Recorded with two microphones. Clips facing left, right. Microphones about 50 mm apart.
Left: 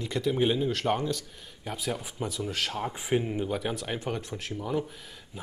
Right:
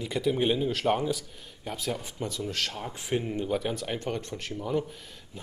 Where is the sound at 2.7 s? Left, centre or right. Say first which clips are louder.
Left 3 dB; centre.